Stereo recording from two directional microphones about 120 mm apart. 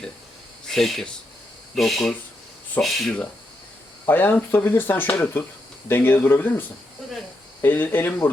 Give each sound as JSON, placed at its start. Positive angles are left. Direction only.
{"t": 0.7, "sound": "speech", "side_deg": 0}
{"t": 4.0, "sound": "speech", "side_deg": 15}